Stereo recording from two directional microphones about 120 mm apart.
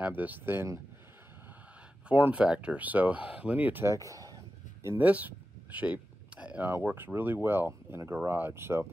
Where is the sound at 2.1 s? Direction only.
10° right (ahead or behind); by 4.4 s 30° right (ahead or behind).